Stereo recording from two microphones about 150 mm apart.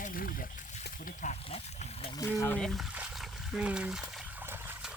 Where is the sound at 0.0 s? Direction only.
70° left (ahead or behind); by 0.9 s 55° left (ahead or behind).